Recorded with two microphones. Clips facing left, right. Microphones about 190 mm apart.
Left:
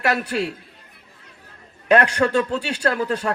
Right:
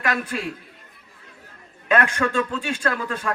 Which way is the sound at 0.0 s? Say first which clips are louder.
Left 3 dB; 35° left (ahead or behind).